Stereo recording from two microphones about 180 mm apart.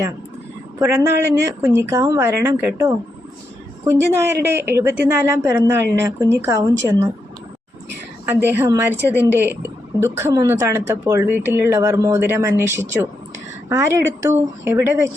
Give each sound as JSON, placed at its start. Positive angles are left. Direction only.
{"t": 0.8, "sound": "speech", "side_deg": -15}
{"t": 8.3, "sound": "speech", "side_deg": -10}